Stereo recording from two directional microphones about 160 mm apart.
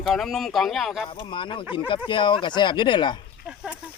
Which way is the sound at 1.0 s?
30° left (ahead or behind).